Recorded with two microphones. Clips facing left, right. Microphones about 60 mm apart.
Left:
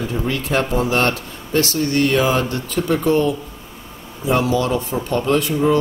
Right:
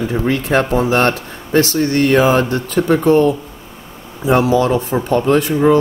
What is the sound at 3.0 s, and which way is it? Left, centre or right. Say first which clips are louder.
Speech: right 5 dB; right.